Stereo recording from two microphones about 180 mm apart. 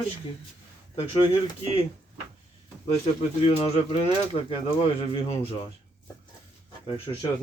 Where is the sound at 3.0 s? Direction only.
35° left (ahead or behind).